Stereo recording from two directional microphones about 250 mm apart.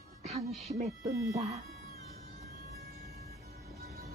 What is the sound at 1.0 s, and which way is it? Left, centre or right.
Speech, centre.